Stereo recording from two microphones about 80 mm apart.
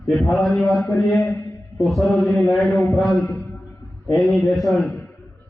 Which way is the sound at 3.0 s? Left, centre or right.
Centre.